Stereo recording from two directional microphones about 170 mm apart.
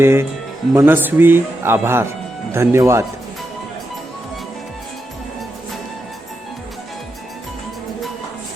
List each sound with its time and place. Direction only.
0.0 s speech: 15° right (ahead or behind)